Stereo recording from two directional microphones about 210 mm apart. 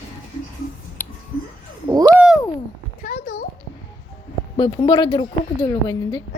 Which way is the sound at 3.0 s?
45° left (ahead or behind).